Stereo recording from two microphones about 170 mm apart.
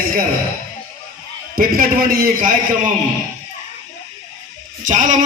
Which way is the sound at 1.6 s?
60° right (ahead or behind).